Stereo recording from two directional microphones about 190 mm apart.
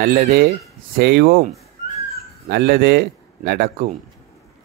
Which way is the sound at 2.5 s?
55° right (ahead or behind).